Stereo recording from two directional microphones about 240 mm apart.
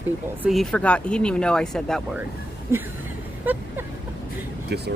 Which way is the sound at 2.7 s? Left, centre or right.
Centre.